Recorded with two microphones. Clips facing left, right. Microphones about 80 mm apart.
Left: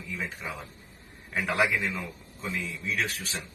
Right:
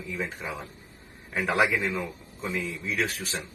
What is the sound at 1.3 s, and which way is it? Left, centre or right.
Speech, centre.